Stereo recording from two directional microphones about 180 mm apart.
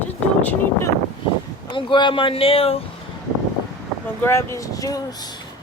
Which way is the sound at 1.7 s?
25° left (ahead or behind).